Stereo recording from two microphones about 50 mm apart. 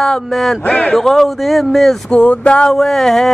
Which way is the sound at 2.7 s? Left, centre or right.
Centre.